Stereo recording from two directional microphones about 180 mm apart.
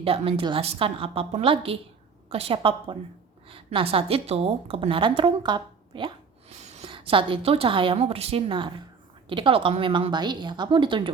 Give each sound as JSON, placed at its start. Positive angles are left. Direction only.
{"t": 0.0, "sound": "a woman's voice", "side_deg": -30}